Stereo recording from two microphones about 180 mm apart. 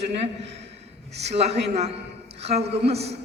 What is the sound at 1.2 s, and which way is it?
Speech, 35° right (ahead or behind).